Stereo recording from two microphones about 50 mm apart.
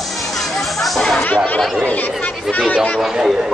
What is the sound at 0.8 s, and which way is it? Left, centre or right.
Chatter, centre.